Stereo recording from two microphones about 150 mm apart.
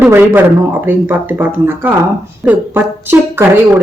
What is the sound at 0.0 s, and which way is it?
Speech, 10° right (ahead or behind).